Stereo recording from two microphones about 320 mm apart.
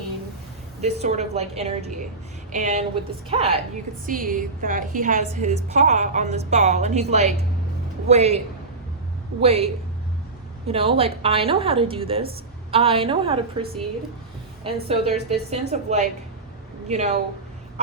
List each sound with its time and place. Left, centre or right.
0.8 s a woman's voice: centre
9.4 s a woman's voice: centre
10.7 s a woman's voice: centre